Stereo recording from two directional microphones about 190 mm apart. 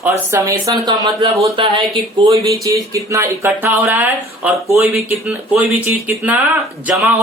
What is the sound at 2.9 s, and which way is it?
Speech, 15° right (ahead or behind).